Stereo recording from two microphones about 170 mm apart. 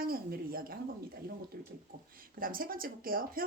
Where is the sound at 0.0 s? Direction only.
60° right (ahead or behind).